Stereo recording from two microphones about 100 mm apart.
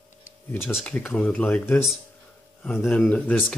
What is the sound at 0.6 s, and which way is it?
Speech, 5° right (ahead or behind).